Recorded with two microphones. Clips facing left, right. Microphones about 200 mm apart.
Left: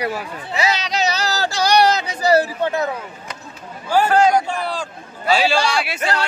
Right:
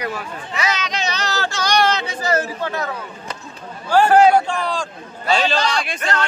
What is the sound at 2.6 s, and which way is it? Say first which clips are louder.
Speech: left 4 dB; 25° left (ahead or behind).